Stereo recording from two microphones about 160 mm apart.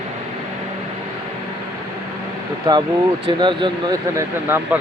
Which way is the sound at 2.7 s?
25° right (ahead or behind).